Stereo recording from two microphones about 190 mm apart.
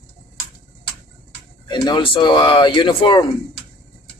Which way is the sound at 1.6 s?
25° left (ahead or behind).